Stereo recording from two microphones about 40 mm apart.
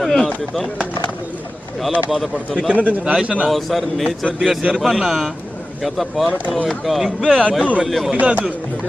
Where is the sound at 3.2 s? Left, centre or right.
Right.